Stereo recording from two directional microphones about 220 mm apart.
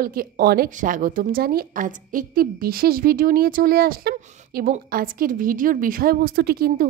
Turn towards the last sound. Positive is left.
turn(degrees=-45)  # may be behind; listen again after turning